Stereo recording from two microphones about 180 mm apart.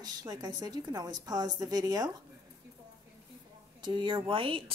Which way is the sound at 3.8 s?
25° right (ahead or behind).